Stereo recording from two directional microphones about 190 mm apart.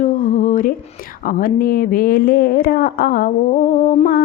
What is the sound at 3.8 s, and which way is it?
Music, 40° left (ahead or behind).